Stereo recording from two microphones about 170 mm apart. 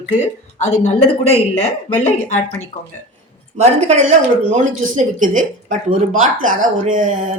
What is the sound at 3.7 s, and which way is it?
Speech, 45° right (ahead or behind).